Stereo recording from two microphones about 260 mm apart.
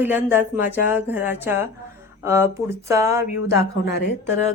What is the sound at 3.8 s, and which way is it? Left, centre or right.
Speech, left.